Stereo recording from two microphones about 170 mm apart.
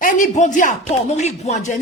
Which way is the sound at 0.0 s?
50° left (ahead or behind).